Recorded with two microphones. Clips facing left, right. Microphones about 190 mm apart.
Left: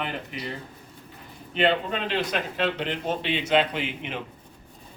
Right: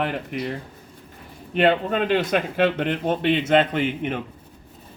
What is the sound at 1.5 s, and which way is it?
A man's voice, 50° right (ahead or behind).